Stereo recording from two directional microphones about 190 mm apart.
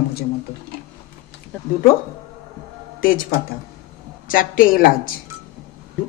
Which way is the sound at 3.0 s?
50° left (ahead or behind).